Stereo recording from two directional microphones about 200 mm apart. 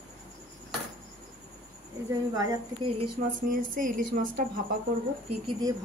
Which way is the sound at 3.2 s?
40° right (ahead or behind).